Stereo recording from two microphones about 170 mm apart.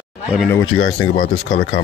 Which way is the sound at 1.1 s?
50° left (ahead or behind).